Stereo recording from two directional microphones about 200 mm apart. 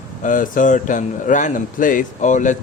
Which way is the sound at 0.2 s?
40° left (ahead or behind).